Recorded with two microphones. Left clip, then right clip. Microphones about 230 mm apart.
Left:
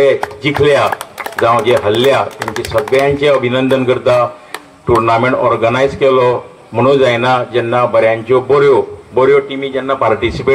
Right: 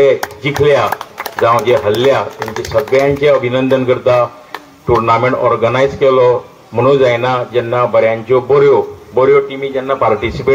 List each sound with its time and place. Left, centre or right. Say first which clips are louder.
0.4 s a man's voice: left 1 dB; left